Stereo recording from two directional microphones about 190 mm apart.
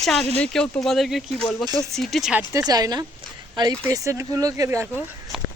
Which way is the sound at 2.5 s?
20° right (ahead or behind).